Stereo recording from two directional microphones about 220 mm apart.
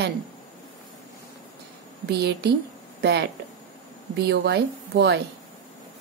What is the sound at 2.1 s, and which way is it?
A woman's voice, 50° right (ahead or behind).